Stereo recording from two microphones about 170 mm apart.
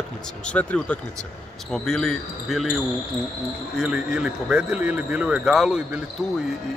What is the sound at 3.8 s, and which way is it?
A man's voice, 5° right (ahead or behind).